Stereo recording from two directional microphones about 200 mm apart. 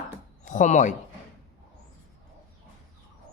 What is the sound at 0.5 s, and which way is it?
Speech, 35° left (ahead or behind).